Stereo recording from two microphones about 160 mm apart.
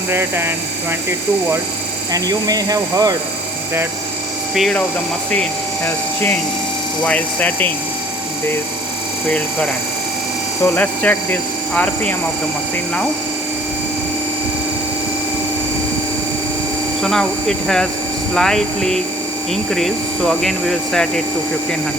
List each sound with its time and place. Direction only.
0.1 s speech: 15° right (ahead or behind)
2.1 s speech: 20° right (ahead or behind)
4.5 s speech: centre (ahead or behind)
7.0 s speech: 10° left (ahead or behind)
10.6 s speech: 10° left (ahead or behind)
17.0 s speech: 5° left (ahead or behind)
18.3 s speech: 5° left (ahead or behind)